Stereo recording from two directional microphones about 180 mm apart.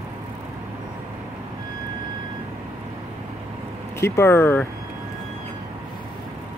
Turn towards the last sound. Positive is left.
turn(degrees=10)  # may be behind; listen again after turning